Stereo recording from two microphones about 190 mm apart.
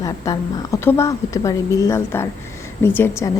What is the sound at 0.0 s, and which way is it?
A woman's voice, 15° left (ahead or behind).